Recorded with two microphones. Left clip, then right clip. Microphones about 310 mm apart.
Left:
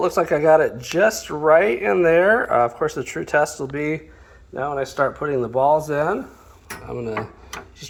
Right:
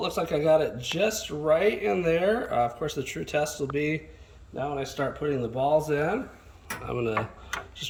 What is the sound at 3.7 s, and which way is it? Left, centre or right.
Speech, left.